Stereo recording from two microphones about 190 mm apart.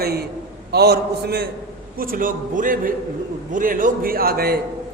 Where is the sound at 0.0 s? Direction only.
55° right (ahead or behind).